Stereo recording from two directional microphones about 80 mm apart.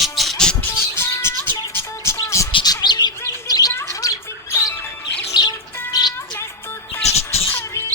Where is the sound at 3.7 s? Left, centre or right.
Left.